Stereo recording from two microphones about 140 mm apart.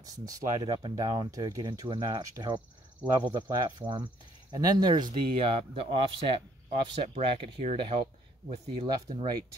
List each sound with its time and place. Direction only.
0.0 s speech: 25° right (ahead or behind)